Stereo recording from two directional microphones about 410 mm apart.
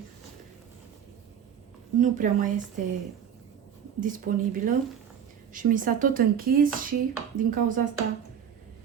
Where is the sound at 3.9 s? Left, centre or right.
Centre.